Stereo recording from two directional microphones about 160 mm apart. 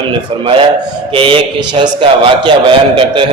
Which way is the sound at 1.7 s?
30° right (ahead or behind).